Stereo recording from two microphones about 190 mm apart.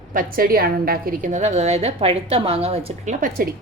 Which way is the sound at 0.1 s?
50° right (ahead or behind).